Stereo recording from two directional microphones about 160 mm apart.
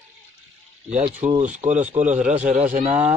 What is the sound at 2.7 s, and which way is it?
Speech, 50° right (ahead or behind).